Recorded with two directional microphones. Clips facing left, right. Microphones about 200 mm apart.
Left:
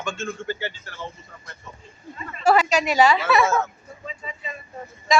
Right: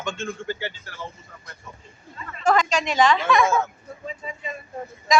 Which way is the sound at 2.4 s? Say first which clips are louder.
Left 2 dB; 10° left (ahead or behind).